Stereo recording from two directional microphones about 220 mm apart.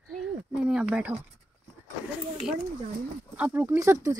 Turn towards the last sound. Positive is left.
turn(degrees=-15)  # may be behind; listen again after turning